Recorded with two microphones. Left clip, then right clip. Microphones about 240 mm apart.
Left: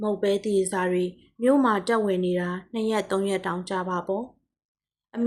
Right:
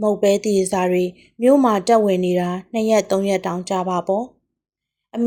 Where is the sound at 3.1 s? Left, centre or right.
Right.